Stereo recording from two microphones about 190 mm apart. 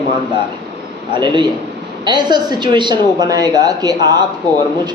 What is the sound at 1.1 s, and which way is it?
A woman's voice, 25° right (ahead or behind).